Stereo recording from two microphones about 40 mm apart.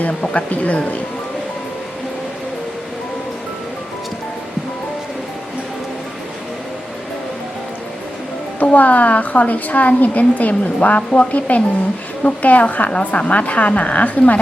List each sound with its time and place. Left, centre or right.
0.0 s a woman's voice: left
8.6 s a woman's voice: left